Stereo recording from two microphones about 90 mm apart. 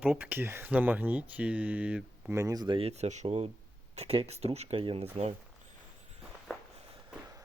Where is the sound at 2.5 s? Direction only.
55° right (ahead or behind).